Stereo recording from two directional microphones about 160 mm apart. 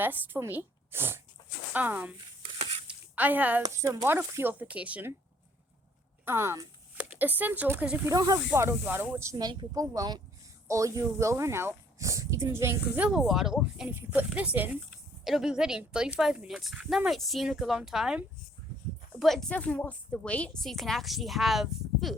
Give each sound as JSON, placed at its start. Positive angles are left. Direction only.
{"t": 0.0, "sound": "speech", "side_deg": -15}
{"t": 2.8, "sound": "a sound", "side_deg": -10}
{"t": 3.6, "sound": "speech", "side_deg": -20}
{"t": 6.2, "sound": "speech", "side_deg": -15}
{"t": 8.1, "sound": "speech", "side_deg": -25}
{"t": 13.1, "sound": "a woman's voice", "side_deg": -5}